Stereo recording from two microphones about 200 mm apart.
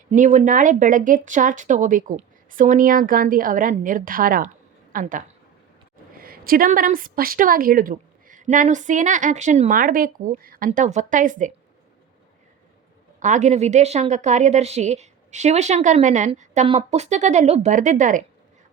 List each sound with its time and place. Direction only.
0.1 s a woman's voice: 35° right (ahead or behind)
13.1 s speech: 40° right (ahead or behind)